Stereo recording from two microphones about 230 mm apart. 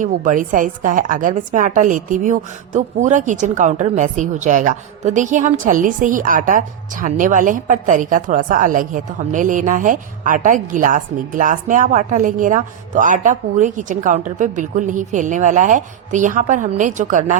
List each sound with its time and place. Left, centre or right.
0.0 s speech: right